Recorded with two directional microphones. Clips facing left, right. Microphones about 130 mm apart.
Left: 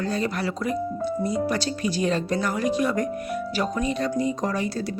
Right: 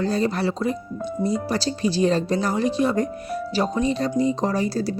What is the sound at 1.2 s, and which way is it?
Speech, 30° right (ahead or behind).